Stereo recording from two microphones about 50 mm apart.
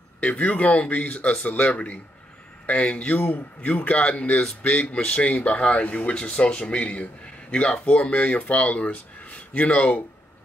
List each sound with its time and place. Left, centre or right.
0.2 s speech: left
4.4 s speech: centre
4.8 s speech: left